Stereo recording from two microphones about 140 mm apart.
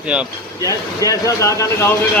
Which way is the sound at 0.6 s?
25° left (ahead or behind).